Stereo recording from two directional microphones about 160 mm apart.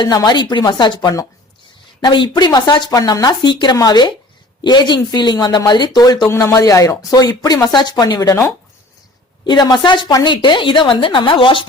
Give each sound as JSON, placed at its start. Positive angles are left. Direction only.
{"t": 0.0, "sound": "speech", "side_deg": 25}